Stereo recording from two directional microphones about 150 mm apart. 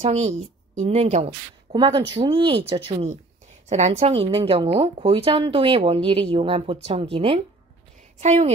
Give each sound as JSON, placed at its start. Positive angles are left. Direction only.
{"t": 0.0, "sound": "speech", "side_deg": -50}
{"t": 1.7, "sound": "speech", "side_deg": -30}
{"t": 3.6, "sound": "speech", "side_deg": -50}
{"t": 8.2, "sound": "speech", "side_deg": -50}